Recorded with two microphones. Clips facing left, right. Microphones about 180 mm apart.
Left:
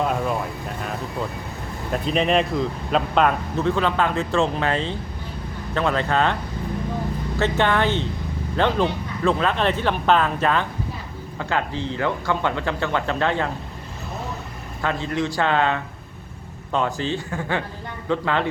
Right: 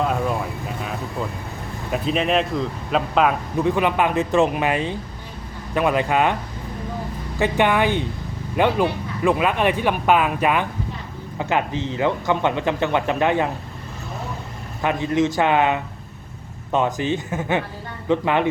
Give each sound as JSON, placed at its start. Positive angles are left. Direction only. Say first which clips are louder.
{"t": 0.0, "sound": "vehicle", "louder": "right 1 dB", "side_deg": 0}
{"t": 1.9, "sound": "speech", "louder": "even", "side_deg": 0}
{"t": 3.6, "sound": "speech", "louder": "right 2 dB", "side_deg": -15}
{"t": 7.3, "sound": "speech", "louder": "right 2 dB", "side_deg": -15}
{"t": 14.8, "sound": "speech", "louder": "right 4 dB", "side_deg": -15}